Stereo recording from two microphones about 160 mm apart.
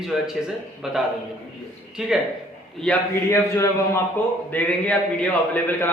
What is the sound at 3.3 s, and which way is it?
A man's voice, 15° left (ahead or behind).